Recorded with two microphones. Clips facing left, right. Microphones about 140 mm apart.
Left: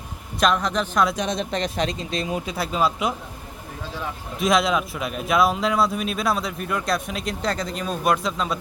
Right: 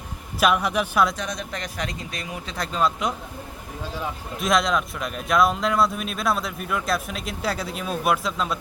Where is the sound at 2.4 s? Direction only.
5° left (ahead or behind).